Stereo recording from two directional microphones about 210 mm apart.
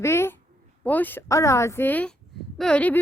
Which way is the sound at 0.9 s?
10° left (ahead or behind).